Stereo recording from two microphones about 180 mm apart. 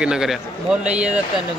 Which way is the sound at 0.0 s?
5° right (ahead or behind).